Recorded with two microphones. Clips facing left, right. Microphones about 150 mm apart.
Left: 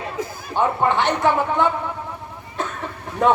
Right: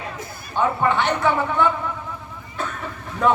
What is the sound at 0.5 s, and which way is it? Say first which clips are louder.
Speech: left 1 dB; 20° left (ahead or behind).